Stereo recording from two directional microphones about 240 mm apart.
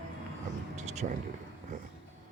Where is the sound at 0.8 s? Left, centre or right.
Right.